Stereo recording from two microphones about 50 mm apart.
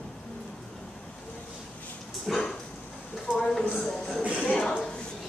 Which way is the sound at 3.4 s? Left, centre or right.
Centre.